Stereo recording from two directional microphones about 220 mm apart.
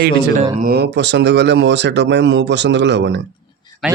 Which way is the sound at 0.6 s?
45° right (ahead or behind).